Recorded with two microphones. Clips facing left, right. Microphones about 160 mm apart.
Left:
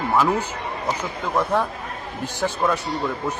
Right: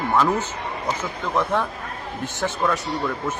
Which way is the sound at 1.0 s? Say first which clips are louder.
Even; 10° left (ahead or behind).